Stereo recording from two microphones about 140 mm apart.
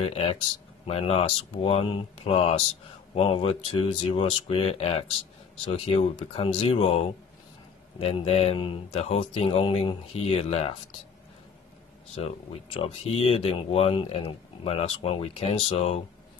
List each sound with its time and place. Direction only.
0.0 s speech: 45° left (ahead or behind)
12.2 s speech: 45° left (ahead or behind)